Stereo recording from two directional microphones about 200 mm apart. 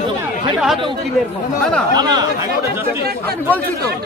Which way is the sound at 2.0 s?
20° right (ahead or behind).